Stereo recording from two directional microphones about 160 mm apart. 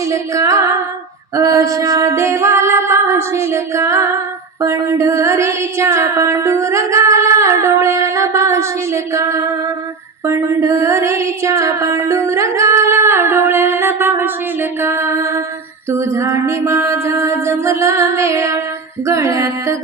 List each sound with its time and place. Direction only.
0.1 s singing: 20° right (ahead or behind)
1.4 s a sound: 20° right (ahead or behind)
19.0 s singing: 20° right (ahead or behind)